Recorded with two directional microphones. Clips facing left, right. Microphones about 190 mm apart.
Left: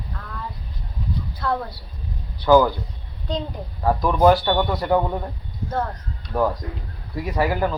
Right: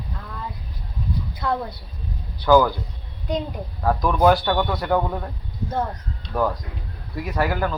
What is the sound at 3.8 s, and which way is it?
Speech, 5° left (ahead or behind).